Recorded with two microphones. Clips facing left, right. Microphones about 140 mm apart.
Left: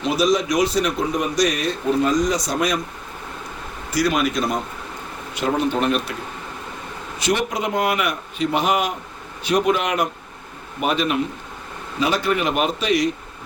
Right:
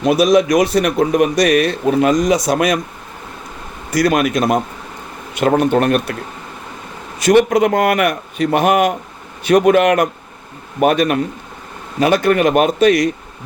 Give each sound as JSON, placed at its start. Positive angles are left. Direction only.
{"t": 0.0, "sound": "speech", "side_deg": -60}
{"t": 4.4, "sound": "speech", "side_deg": -70}
{"t": 7.2, "sound": "speech", "side_deg": -55}